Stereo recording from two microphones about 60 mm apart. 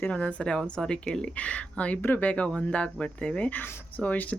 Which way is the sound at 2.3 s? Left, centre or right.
Left.